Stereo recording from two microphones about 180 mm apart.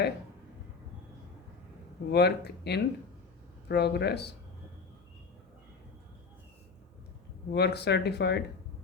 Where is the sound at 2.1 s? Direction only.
65° left (ahead or behind).